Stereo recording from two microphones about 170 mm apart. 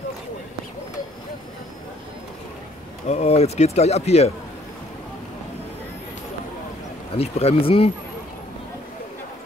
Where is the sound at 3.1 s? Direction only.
40° left (ahead or behind).